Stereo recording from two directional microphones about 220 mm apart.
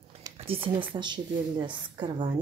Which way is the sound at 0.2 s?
25° right (ahead or behind).